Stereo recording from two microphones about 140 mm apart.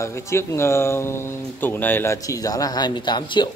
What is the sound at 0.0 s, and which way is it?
A man's voice, 20° left (ahead or behind).